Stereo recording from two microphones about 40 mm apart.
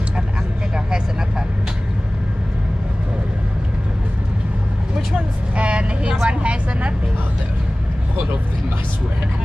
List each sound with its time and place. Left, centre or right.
5.6 s vehicle: right